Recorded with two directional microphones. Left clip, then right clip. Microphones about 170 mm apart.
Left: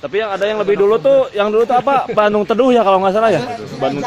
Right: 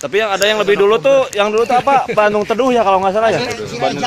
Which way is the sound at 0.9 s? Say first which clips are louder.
Even; 20° left (ahead or behind).